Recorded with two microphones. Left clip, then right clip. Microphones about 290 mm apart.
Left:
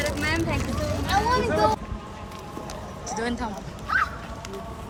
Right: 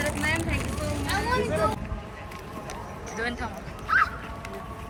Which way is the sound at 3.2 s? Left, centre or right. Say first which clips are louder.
Left 1 dB; centre.